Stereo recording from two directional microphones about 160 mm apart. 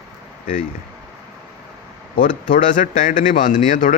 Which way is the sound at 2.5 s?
55° left (ahead or behind).